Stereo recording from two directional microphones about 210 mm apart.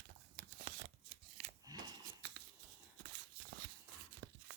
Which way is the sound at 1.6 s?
20° right (ahead or behind).